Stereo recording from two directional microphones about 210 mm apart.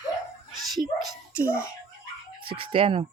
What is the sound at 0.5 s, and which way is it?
Dog, centre (ahead or behind).